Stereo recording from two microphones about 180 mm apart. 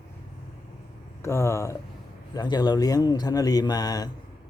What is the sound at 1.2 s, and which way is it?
Speech, 15° left (ahead or behind).